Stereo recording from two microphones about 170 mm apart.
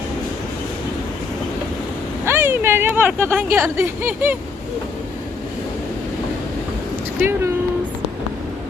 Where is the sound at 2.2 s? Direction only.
15° right (ahead or behind).